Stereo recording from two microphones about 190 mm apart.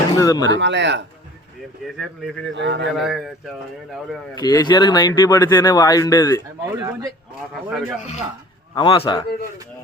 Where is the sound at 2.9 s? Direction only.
Centre (ahead or behind).